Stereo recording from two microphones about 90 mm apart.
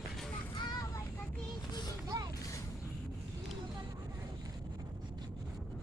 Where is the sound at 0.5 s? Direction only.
55° left (ahead or behind).